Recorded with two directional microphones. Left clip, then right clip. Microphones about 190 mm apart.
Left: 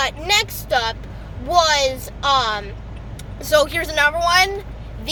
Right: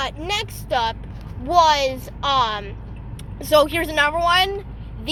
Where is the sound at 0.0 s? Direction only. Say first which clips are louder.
Left 6 dB; 10° left (ahead or behind).